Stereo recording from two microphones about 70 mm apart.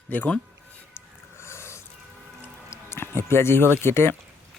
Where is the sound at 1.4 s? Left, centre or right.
Left.